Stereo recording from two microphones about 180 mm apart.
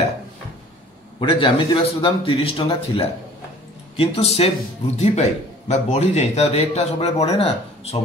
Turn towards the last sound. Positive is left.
turn(degrees=35)  # may be behind; listen again after turning